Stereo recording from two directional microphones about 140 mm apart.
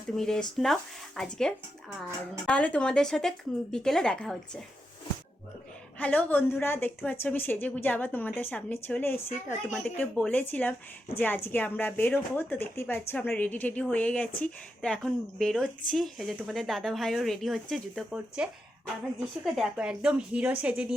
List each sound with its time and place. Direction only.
0.2 s speech: 5° left (ahead or behind)
6.0 s a woman's voice: 10° left (ahead or behind)
9.6 s a woman's voice: 5° left (ahead or behind)
19.5 s a woman's voice: 5° right (ahead or behind)